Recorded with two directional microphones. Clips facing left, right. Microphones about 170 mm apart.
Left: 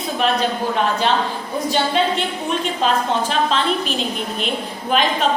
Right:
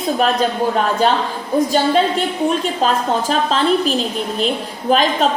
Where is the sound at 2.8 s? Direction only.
40° right (ahead or behind).